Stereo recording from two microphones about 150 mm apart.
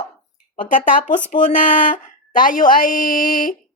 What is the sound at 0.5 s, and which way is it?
Speech, 60° left (ahead or behind).